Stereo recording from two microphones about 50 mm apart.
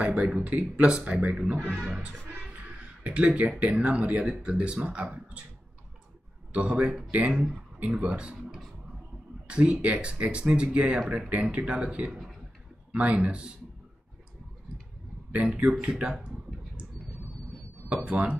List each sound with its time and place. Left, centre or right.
0.0 s speech: right
6.5 s speech: right
9.5 s speech: right
15.6 s speech: centre
18.1 s speech: right